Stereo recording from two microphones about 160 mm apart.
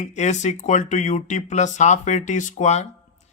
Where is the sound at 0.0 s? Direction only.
50° left (ahead or behind).